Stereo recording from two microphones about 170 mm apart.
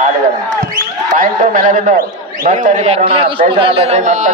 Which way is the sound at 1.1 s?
50° right (ahead or behind).